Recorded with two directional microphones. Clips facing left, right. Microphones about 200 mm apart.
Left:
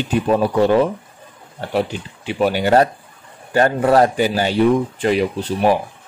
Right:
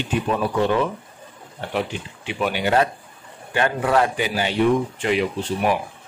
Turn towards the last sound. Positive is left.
turn(degrees=40)  # may be behind; listen again after turning